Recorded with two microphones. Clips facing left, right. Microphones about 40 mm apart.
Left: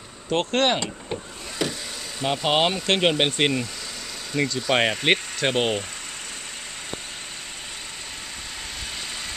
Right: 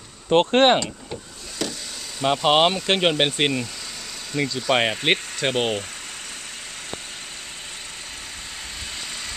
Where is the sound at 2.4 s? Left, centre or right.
Centre.